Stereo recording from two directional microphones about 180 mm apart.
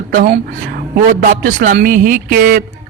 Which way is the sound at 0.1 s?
60° right (ahead or behind).